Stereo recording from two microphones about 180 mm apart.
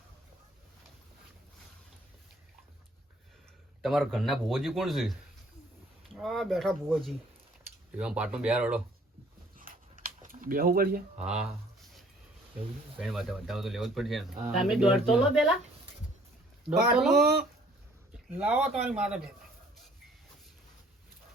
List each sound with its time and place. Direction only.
3.8 s speech: centre (ahead or behind)
6.1 s speech: centre (ahead or behind)
9.6 s a sound: 50° right (ahead or behind)
11.2 s a sound: 5° right (ahead or behind)
13.0 s speech: centre (ahead or behind)
16.6 s speech: 5° right (ahead or behind)
18.3 s speech: 5° right (ahead or behind)